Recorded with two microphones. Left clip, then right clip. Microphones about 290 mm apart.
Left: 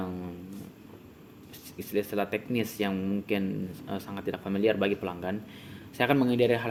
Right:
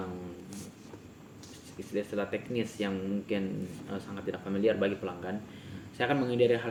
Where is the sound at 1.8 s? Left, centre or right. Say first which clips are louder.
Left 4 dB; left.